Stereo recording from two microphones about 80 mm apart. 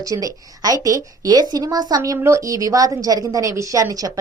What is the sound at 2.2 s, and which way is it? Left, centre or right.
A woman's voice, right.